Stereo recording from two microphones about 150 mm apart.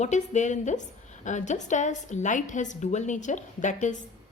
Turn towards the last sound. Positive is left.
turn(degrees=55)  # may be behind; listen again after turning